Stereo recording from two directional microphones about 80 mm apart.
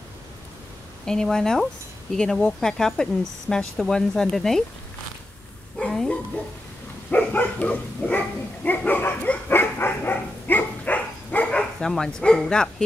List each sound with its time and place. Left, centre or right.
1.0 s speech: centre
5.8 s a sound: centre
7.1 s dog: centre